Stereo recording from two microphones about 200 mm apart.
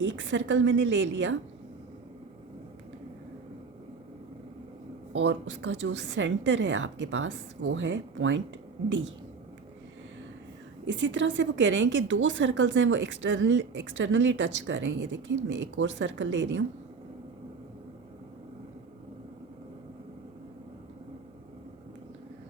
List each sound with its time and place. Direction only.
0.2 s a woman's voice: 70° right (ahead or behind)
5.1 s a woman's voice: 65° right (ahead or behind)
10.8 s a woman's voice: 65° right (ahead or behind)